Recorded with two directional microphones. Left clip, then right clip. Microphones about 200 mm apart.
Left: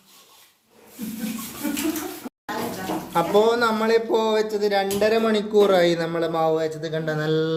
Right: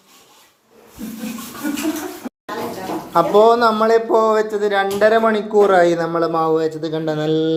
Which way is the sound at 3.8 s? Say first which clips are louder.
Right 6 dB; 20° left (ahead or behind).